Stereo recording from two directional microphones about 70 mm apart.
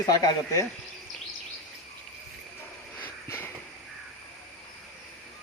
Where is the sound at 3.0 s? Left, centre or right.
Left.